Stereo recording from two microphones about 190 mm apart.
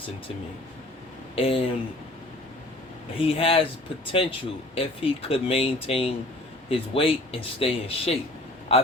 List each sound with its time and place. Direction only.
1.4 s speech: 30° left (ahead or behind)
3.2 s speech: 30° left (ahead or behind)